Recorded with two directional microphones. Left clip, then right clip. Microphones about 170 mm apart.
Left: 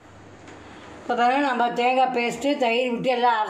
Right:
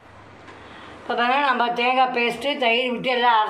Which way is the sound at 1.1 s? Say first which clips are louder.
Right 1 dB; 55° left (ahead or behind).